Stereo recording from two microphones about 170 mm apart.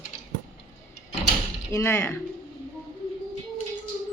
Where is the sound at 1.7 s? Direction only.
15° left (ahead or behind).